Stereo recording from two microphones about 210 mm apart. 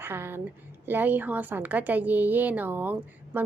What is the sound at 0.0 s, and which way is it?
A woman's voice, 10° right (ahead or behind).